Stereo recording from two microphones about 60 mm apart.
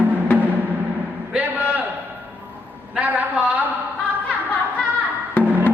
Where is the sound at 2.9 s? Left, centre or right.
Right.